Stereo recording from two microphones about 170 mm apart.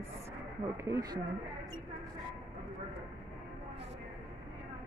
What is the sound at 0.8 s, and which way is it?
Speech, 20° right (ahead or behind).